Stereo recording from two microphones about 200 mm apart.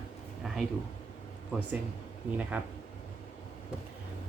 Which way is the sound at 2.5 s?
10° right (ahead or behind).